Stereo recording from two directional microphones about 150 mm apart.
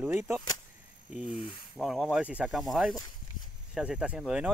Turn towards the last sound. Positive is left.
turn(degrees=-5)  # may be behind; listen again after turning